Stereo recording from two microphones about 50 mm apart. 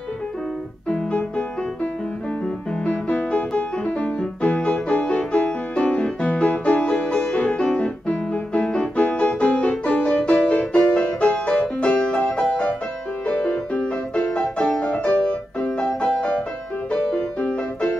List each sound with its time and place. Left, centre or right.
2.8 s music: left
16.9 s music: left